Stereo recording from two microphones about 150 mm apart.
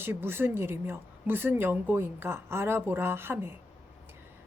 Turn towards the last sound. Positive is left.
turn(degrees=-15)  # may be behind; listen again after turning